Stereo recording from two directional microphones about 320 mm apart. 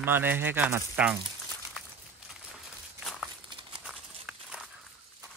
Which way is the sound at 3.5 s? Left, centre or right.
Centre.